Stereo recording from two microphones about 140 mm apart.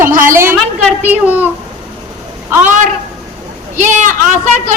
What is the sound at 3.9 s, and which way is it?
Speech, 65° right (ahead or behind).